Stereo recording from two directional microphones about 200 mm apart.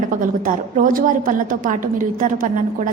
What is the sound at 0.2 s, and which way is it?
A woman's voice, 40° right (ahead or behind).